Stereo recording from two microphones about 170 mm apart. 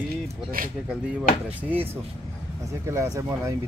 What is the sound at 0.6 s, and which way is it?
Speech, 55° right (ahead or behind).